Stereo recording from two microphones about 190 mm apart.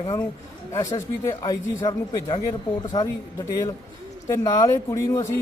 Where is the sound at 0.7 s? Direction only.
15° left (ahead or behind).